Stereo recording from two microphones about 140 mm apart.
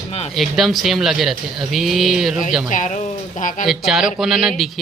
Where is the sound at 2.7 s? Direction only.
65° left (ahead or behind).